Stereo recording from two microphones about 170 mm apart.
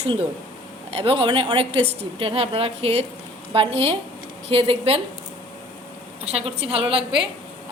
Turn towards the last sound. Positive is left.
turn(degrees=-30)  # may be behind; listen again after turning